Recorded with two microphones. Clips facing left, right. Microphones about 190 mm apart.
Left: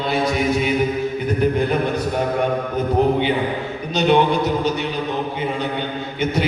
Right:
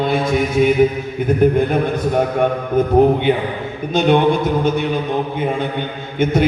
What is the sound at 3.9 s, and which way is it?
Speech, 50° right (ahead or behind).